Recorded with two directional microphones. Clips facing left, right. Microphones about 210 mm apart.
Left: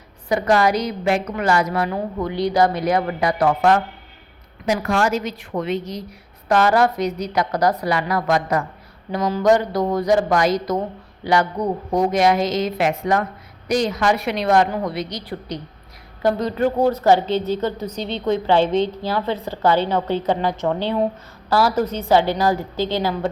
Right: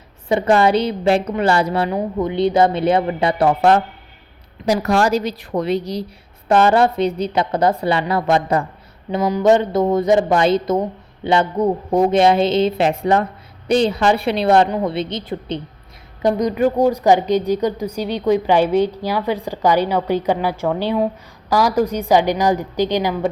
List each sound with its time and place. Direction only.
0.3 s a woman's voice: 25° right (ahead or behind)